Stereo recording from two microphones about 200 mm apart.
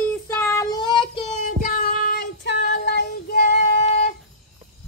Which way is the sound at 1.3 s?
45° left (ahead or behind).